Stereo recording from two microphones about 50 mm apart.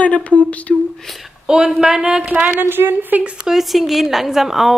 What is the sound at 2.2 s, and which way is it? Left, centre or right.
Speech, right.